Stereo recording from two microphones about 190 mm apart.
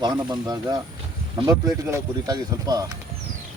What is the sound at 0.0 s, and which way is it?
Speech, 20° right (ahead or behind).